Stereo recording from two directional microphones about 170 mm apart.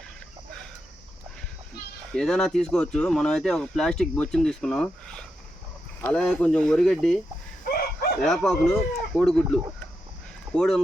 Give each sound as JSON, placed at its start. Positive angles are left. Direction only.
{"t": 2.1, "sound": "speech", "side_deg": 5}
{"t": 7.7, "sound": "chicken", "side_deg": 60}
{"t": 8.2, "sound": "speech", "side_deg": 5}